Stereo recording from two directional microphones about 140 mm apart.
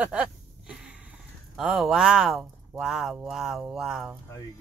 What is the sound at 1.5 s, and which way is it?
Speech, centre (ahead or behind).